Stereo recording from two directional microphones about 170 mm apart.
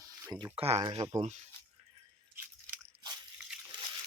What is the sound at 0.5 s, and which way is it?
Speech, 35° right (ahead or behind).